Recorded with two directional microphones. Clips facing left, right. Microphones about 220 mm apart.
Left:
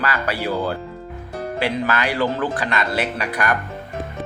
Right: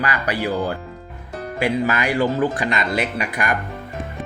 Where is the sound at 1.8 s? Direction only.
15° right (ahead or behind).